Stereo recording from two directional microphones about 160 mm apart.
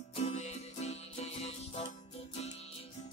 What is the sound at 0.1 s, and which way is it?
Music, 45° left (ahead or behind).